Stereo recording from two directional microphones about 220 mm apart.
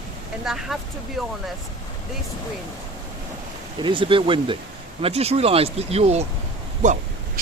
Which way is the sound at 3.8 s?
25° right (ahead or behind).